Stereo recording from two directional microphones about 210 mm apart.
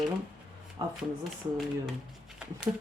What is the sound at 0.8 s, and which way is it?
Speech, 20° right (ahead or behind).